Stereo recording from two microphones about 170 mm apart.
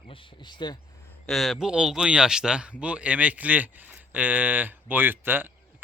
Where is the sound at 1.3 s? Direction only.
Centre (ahead or behind).